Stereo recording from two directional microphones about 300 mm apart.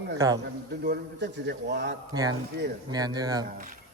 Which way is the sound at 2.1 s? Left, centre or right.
Centre.